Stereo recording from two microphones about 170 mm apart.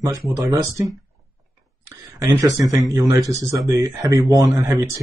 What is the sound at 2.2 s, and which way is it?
Speech, 20° right (ahead or behind).